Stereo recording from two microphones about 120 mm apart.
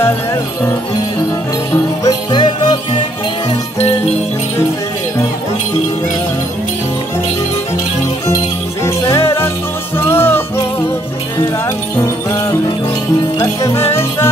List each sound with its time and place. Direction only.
2.0 s music: 40° left (ahead or behind)
9.1 s music: 20° left (ahead or behind)
12.0 s music: 30° left (ahead or behind)